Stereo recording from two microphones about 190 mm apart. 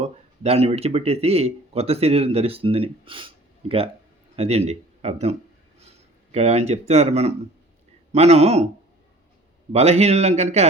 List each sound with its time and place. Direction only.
0.0 s a man's voice: 30° right (ahead or behind)
9.7 s speech: 35° right (ahead or behind)